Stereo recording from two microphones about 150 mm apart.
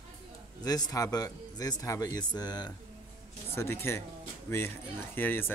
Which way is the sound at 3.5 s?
15° left (ahead or behind).